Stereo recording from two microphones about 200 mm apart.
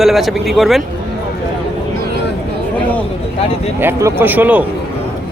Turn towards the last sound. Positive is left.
turn(degrees=-10)  # may be behind; listen again after turning